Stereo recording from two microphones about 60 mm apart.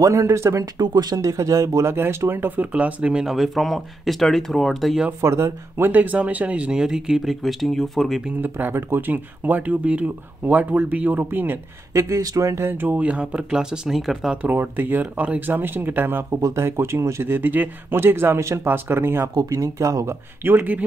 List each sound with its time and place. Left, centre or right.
0.0 s speech: right
2.0 s speech: right; by 3.3 s centre
3.3 s speech: centre
5.2 s speech: right
5.9 s speech: right
6.8 s speech: centre
8.4 s speech: right
11.9 s speech: right
12.6 s speech: right
13.5 s speech: centre
14.4 s speech: right
19.3 s speech: right
20.4 s speech: right